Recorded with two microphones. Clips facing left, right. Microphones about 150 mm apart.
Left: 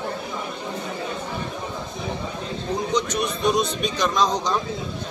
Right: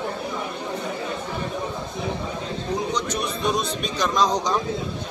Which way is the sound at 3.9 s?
10° right (ahead or behind).